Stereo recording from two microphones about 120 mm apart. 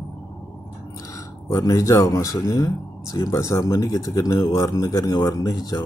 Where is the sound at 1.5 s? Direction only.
25° left (ahead or behind).